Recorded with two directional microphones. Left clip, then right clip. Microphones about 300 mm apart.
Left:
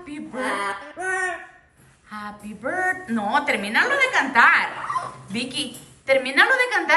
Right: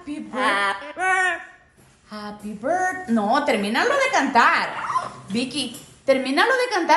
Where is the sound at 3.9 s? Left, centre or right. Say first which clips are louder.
Even; centre.